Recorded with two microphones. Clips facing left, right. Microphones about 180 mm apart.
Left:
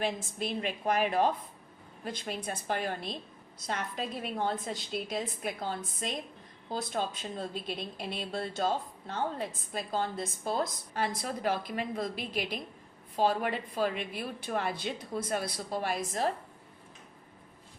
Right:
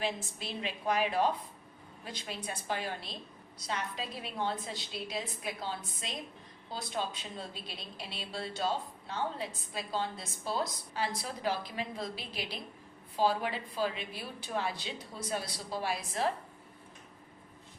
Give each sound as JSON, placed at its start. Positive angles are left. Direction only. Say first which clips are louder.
{"t": 0.0, "sound": "a woman's voice", "louder": "left 3 dB", "side_deg": 50}